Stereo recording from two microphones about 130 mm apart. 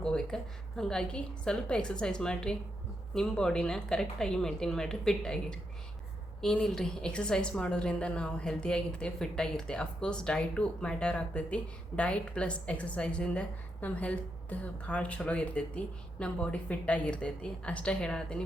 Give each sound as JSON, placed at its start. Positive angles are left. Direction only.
{"t": 0.0, "sound": "a woman's voice", "side_deg": 5}